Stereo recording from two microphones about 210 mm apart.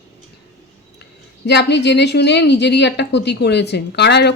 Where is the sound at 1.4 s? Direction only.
55° left (ahead or behind).